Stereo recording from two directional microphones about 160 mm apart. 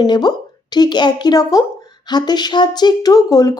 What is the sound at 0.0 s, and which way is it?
Speech, 25° left (ahead or behind).